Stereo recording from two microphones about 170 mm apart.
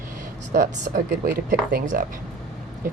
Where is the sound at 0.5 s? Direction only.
60° right (ahead or behind).